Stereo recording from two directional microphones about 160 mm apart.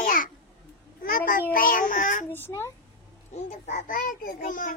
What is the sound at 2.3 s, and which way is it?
Speech, 15° left (ahead or behind).